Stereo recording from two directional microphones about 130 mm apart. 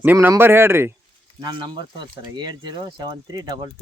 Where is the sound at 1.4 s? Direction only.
35° right (ahead or behind).